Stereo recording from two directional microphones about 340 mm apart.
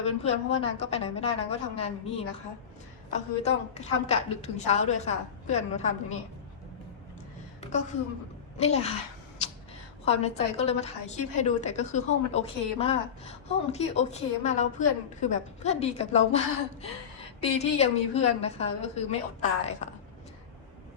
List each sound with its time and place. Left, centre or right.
0.0 s a woman's voice: centre
7.7 s a woman's voice: left
10.1 s a woman's voice: centre
17.4 s a woman's voice: centre